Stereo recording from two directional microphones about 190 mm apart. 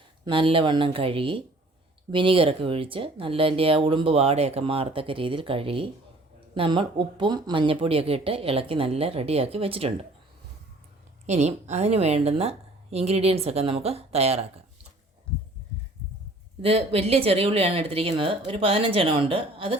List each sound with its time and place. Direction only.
0.3 s speech: 30° right (ahead or behind)
11.3 s a woman's voice: 35° right (ahead or behind)
16.6 s speech: 30° right (ahead or behind)